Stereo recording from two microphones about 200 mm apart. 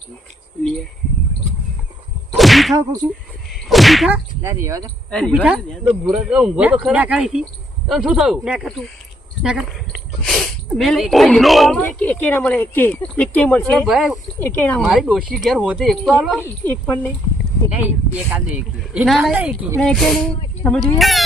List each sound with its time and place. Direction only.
2.3 s whip: centre (ahead or behind)
2.7 s whip: 20° right (ahead or behind)
3.5 s whip: centre (ahead or behind)
4.4 s speech: 15° right (ahead or behind)
5.1 s speech: centre (ahead or behind)
14.3 s speech: 10° left (ahead or behind)
14.8 s speech: centre (ahead or behind)
17.7 s speech: 5° right (ahead or behind)